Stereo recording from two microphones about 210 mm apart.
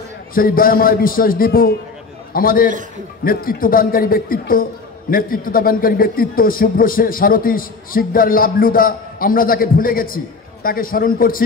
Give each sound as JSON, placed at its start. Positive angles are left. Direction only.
{"t": 0.3, "sound": "a man's voice", "side_deg": 45}